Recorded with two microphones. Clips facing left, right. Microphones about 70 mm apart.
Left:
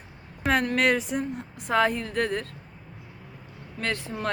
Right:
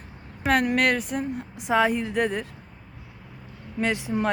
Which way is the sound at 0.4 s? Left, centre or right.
Centre.